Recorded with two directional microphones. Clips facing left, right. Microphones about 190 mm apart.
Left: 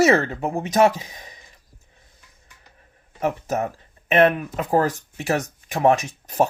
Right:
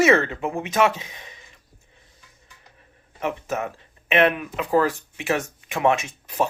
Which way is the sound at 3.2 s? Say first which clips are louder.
Left 3 dB; 40° left (ahead or behind).